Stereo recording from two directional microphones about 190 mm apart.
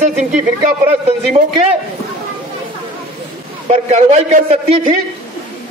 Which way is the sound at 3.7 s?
35° right (ahead or behind).